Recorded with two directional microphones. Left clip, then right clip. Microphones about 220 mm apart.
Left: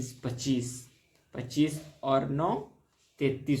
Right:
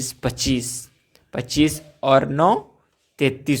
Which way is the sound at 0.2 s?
40° right (ahead or behind).